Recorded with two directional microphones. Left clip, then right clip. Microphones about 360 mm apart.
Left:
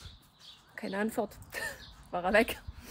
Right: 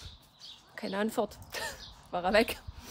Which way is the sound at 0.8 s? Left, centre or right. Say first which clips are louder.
Right 2 dB; centre.